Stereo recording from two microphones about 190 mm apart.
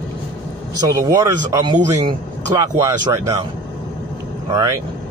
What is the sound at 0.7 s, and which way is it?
Speech, 20° right (ahead or behind).